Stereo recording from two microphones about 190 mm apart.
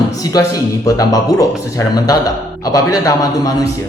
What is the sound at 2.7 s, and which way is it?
Speech, 20° left (ahead or behind).